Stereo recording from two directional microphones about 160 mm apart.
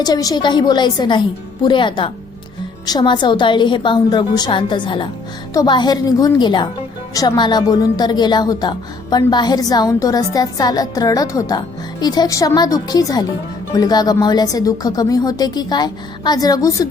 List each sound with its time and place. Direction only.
0.0 s a woman's voice: 25° left (ahead or behind)